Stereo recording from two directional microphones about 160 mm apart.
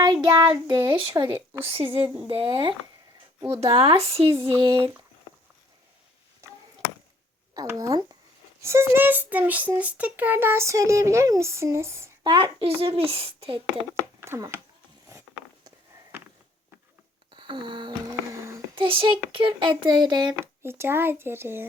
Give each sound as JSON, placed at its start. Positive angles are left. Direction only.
{"t": 0.0, "sound": "child singing", "side_deg": -25}
{"t": 0.5, "sound": "a child's voice", "side_deg": -25}
{"t": 6.4, "sound": "chop", "side_deg": -15}
{"t": 7.5, "sound": "a child's voice", "side_deg": -20}
{"t": 12.2, "sound": "a child's voice", "side_deg": -30}
{"t": 14.2, "sound": "speech", "side_deg": -15}
{"t": 17.3, "sound": "a sound", "side_deg": -30}
{"t": 18.1, "sound": "a sound", "side_deg": -20}
{"t": 18.8, "sound": "a child's voice", "side_deg": -30}
{"t": 20.4, "sound": "a child's voice", "side_deg": -15}